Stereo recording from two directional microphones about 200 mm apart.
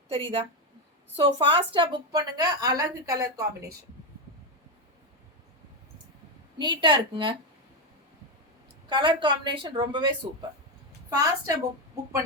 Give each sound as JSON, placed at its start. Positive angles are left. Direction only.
{"t": 0.1, "sound": "a woman's voice", "side_deg": -25}
{"t": 6.6, "sound": "a woman's voice", "side_deg": -20}
{"t": 8.9, "sound": "a woman's voice", "side_deg": -25}
{"t": 11.1, "sound": "a woman's voice", "side_deg": -20}